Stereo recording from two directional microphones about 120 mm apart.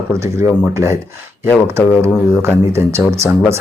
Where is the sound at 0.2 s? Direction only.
20° right (ahead or behind).